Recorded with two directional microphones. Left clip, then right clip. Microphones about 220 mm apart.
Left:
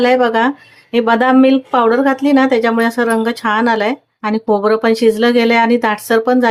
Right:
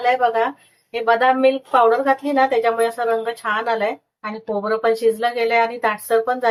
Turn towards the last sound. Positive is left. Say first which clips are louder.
# left 6 dB
turn(degrees=40)  # may be behind; listen again after turning